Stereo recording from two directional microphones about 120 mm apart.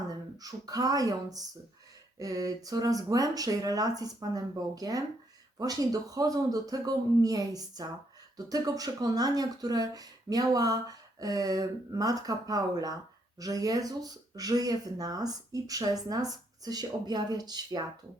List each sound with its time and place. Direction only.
0.3 s speech: 30° right (ahead or behind)